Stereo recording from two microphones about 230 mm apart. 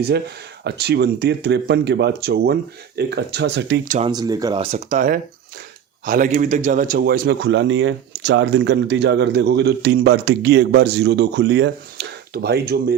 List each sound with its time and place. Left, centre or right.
0.6 s a man's voice: right
3.8 s speech: right
4.1 s a man's voice: centre; by 13.0 s right